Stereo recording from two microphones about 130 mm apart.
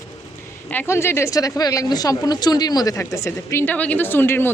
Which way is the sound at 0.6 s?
15° left (ahead or behind).